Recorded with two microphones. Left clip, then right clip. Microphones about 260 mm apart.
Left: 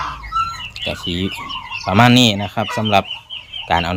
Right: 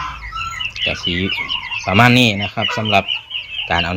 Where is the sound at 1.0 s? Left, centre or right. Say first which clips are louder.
Right 4 dB; centre.